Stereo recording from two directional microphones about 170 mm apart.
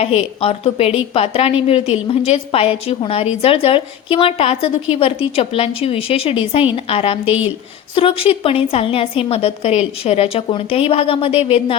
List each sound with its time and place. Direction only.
0.0 s a woman's voice: 35° left (ahead or behind)